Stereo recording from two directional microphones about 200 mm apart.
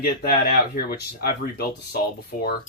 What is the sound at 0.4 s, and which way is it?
Speech, 50° left (ahead or behind).